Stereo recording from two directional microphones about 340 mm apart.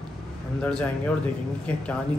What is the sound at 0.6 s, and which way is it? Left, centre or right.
Speech, centre.